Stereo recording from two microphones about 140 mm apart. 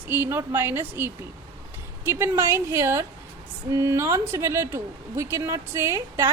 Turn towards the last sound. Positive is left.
turn(degrees=-20)  # may be behind; listen again after turning